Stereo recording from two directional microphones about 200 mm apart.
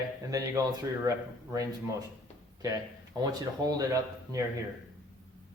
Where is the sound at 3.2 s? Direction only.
20° right (ahead or behind).